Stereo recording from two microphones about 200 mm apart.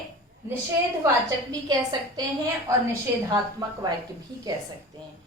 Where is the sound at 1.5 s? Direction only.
20° right (ahead or behind).